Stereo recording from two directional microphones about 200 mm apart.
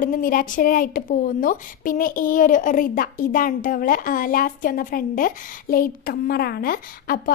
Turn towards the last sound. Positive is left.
turn(degrees=45)  # may be behind; listen again after turning